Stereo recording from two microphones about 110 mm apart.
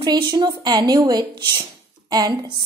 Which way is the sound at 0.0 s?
40° right (ahead or behind).